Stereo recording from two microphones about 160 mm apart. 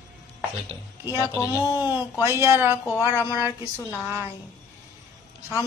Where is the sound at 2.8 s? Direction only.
15° left (ahead or behind).